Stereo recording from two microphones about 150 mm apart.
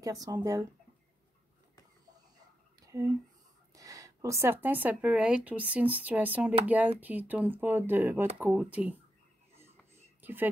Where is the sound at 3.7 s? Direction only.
20° right (ahead or behind).